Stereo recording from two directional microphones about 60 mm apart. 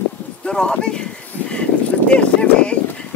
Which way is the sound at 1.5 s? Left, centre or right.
Centre.